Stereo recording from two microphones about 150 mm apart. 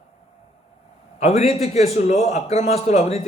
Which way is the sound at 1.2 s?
45° left (ahead or behind).